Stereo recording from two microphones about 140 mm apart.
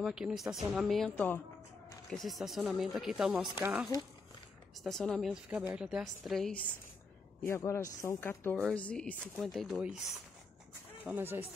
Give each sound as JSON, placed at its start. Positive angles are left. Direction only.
{"t": 0.0, "sound": "speech", "side_deg": -5}
{"t": 2.0, "sound": "speech", "side_deg": 0}
{"t": 4.8, "sound": "speech", "side_deg": 5}
{"t": 5.5, "sound": "speech", "side_deg": -10}
{"t": 7.4, "sound": "speech", "side_deg": 20}
{"t": 8.5, "sound": "speech", "side_deg": 5}
{"t": 11.1, "sound": "speech", "side_deg": -15}